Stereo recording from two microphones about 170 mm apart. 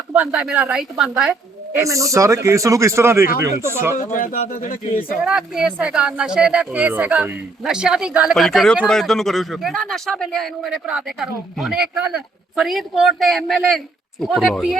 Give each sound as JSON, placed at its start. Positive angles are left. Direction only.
{"t": 0.1, "sound": "a woman's voice", "side_deg": -10}
{"t": 1.8, "sound": "speech", "side_deg": -20}
{"t": 4.1, "sound": "speech", "side_deg": 50}
{"t": 5.2, "sound": "a man's voice", "side_deg": -5}